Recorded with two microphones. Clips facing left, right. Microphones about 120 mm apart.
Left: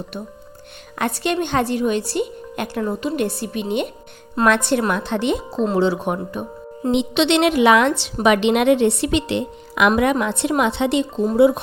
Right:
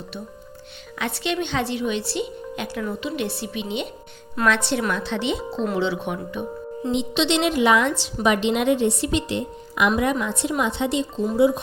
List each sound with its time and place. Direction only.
0.9 s a woman's voice: 50° left (ahead or behind)
6.9 s a woman's voice: 70° left (ahead or behind); by 9.9 s 85° left
10.0 s a woman's voice: 70° left (ahead or behind)